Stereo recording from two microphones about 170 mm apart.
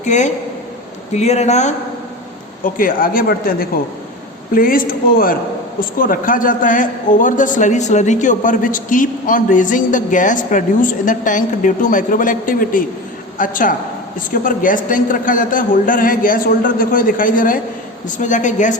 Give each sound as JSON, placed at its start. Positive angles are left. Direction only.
{"t": 0.0, "sound": "a man's voice", "side_deg": 45}
{"t": 2.6, "sound": "a man's voice", "side_deg": 55}